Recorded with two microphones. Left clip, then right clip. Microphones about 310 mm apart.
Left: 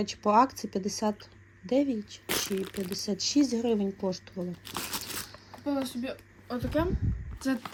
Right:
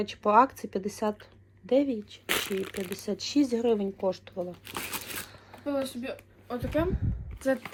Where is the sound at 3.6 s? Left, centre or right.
Right.